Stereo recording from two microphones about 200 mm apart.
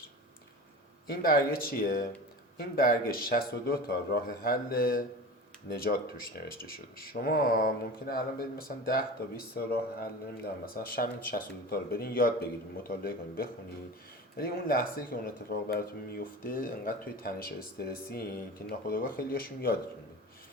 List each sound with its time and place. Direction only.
1.0 s speech: 50° left (ahead or behind)